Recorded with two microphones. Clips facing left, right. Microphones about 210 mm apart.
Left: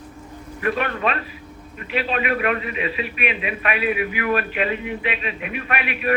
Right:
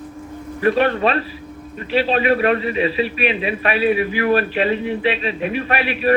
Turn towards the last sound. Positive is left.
turn(degrees=-30)  # may be behind; listen again after turning